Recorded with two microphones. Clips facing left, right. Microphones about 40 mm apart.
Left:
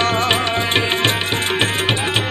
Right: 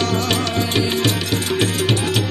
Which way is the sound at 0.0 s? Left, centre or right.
Left.